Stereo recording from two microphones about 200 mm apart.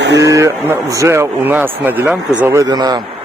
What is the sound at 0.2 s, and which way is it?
Speech, 15° right (ahead or behind).